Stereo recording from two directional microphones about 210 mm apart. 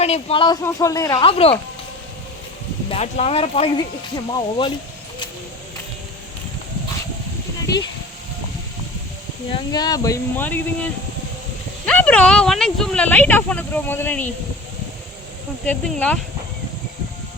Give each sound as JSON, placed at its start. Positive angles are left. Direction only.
{"t": 0.0, "sound": "speech", "side_deg": 30}
{"t": 2.9, "sound": "speech", "side_deg": 30}
{"t": 9.5, "sound": "speech", "side_deg": 20}
{"t": 11.9, "sound": "speech", "side_deg": 5}
{"t": 15.6, "sound": "speech", "side_deg": 5}